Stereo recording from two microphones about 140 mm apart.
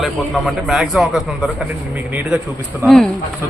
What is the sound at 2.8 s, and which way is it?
Speech, 5° left (ahead or behind).